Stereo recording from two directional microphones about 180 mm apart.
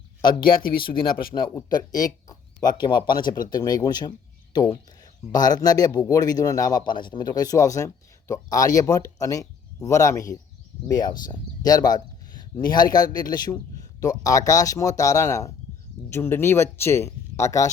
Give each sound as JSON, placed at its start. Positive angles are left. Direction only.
{"t": 0.2, "sound": "a man's voice", "side_deg": 25}